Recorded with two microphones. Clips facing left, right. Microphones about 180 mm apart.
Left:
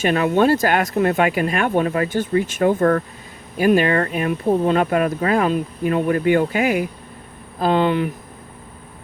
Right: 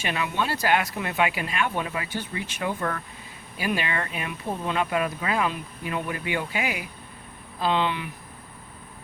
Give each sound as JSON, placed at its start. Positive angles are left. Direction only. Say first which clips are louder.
{"t": 0.0, "sound": "speech", "louder": "left 12 dB", "side_deg": 50}